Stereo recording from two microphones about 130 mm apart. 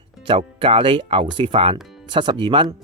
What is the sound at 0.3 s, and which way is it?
Speech, 40° right (ahead or behind).